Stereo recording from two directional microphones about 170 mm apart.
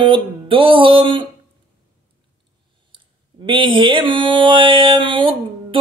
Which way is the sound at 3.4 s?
30° right (ahead or behind).